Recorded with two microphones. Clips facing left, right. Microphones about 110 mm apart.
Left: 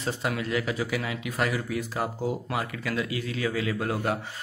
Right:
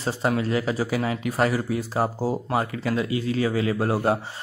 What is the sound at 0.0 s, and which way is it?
Speech, 35° right (ahead or behind).